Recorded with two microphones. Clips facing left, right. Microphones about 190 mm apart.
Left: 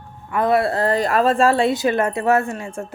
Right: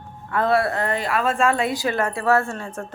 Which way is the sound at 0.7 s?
35° left (ahead or behind).